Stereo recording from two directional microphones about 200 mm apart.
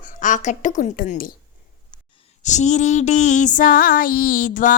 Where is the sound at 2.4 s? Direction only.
35° left (ahead or behind).